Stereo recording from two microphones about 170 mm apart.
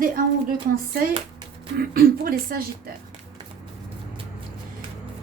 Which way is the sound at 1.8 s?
60° right (ahead or behind).